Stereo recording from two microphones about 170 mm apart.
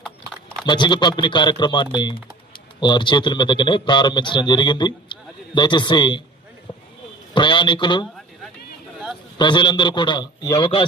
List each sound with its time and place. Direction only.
0.6 s a man's voice: 25° left (ahead or behind)
7.3 s a man's voice: 25° left (ahead or behind)
9.4 s a man's voice: 25° left (ahead or behind)